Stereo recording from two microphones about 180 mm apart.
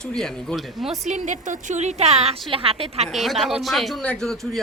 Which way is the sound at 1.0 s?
45° right (ahead or behind).